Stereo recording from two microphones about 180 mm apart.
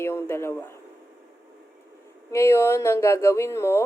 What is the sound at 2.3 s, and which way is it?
A woman's voice, 15° left (ahead or behind).